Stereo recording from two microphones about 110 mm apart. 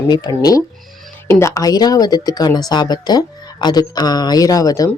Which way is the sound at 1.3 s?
25° left (ahead or behind).